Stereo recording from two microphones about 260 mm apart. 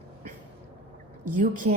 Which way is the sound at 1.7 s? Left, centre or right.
Right.